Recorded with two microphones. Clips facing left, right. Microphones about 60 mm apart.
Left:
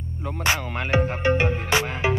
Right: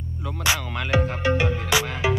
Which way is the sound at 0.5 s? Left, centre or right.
Left.